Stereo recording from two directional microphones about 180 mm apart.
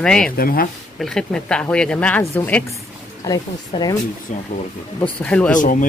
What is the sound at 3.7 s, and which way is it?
Speech, 20° left (ahead or behind).